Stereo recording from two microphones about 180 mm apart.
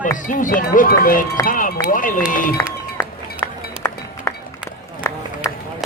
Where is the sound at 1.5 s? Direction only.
50° left (ahead or behind).